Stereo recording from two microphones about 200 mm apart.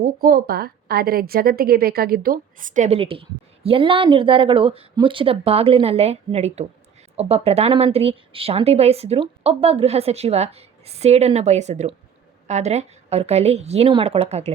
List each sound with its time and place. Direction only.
0.0 s a woman's voice: 50° right (ahead or behind); by 14.5 s 35° right (ahead or behind)